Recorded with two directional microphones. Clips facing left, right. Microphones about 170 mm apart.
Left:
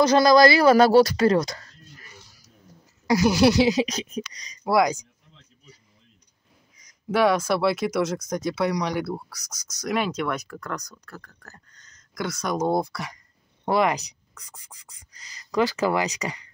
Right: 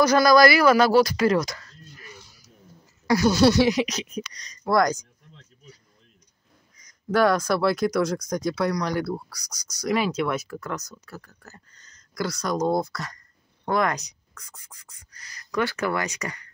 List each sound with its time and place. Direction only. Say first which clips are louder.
0.0 s speech: left 1 dB; 25° left (ahead or behind)
3.1 s speech: even; 20° left (ahead or behind)
6.8 s speech: even; 5° left (ahead or behind)
16.2 s speech: left 2 dB; 15° left (ahead or behind)